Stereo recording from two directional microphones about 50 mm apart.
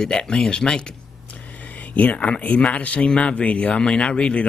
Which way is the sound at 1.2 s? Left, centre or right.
Left.